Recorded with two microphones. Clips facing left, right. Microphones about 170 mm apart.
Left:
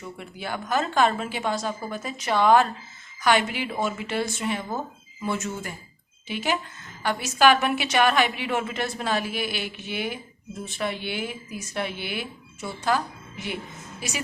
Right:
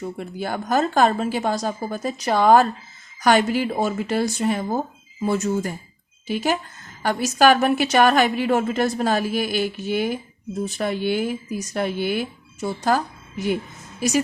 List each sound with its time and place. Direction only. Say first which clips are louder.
0.0 s a woman's voice: right 7 dB; 40° right (ahead or behind)